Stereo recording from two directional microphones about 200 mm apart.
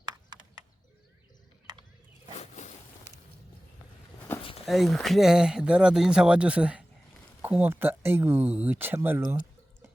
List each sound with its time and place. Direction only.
0.0 s horse: 20° right (ahead or behind)
2.3 s boat: 35° left (ahead or behind)
4.6 s speech: centre (ahead or behind)